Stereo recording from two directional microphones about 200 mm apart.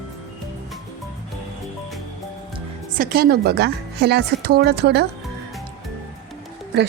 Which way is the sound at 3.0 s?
50° right (ahead or behind).